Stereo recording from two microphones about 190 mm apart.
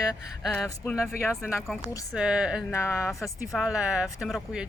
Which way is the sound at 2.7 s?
15° left (ahead or behind).